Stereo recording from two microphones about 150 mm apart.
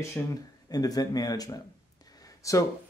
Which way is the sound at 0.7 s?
25° left (ahead or behind).